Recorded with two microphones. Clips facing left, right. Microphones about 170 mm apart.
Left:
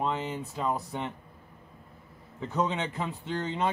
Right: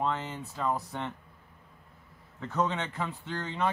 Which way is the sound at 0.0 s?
15° left (ahead or behind).